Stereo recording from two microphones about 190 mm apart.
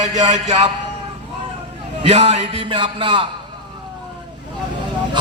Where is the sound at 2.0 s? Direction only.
30° right (ahead or behind).